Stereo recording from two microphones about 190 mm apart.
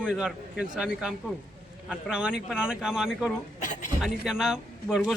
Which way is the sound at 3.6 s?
45° left (ahead or behind).